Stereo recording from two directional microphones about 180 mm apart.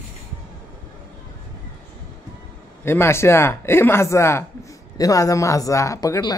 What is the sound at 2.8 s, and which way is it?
Speech, 15° left (ahead or behind).